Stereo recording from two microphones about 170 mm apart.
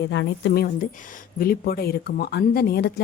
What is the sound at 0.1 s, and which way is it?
A woman's voice, 85° left.